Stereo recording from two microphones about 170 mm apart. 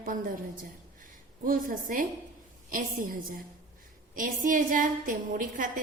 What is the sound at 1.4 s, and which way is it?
A woman's voice, 55° right (ahead or behind).